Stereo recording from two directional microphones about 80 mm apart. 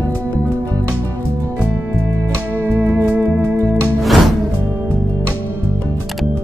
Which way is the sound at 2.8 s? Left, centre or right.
Right.